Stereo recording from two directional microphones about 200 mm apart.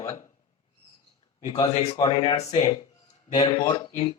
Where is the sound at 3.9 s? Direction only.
35° left (ahead or behind).